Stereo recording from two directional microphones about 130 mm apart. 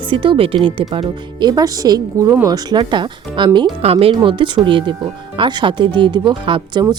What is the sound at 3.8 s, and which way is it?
Speech, 50° right (ahead or behind).